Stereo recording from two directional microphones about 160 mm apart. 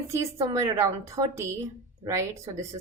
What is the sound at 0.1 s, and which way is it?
A woman's voice, 20° right (ahead or behind).